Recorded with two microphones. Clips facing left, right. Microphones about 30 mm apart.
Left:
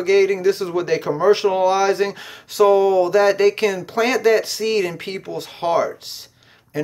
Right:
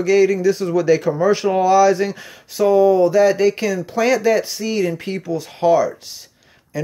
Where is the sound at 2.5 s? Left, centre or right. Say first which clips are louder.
Right 1 dB; left.